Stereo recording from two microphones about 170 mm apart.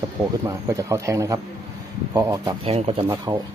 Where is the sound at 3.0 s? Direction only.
25° right (ahead or behind).